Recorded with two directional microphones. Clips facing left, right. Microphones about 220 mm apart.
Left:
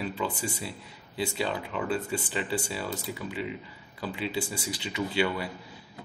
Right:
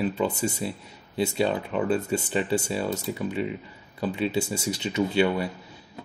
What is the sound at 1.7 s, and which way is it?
Speech, 55° right (ahead or behind).